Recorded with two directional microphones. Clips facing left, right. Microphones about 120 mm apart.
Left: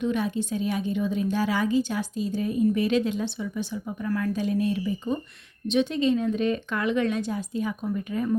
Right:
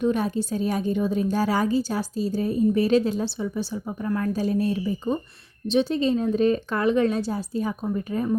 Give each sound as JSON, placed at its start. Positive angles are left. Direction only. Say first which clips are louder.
{"t": 0.0, "sound": "a woman's voice", "louder": "right 3 dB", "side_deg": -40}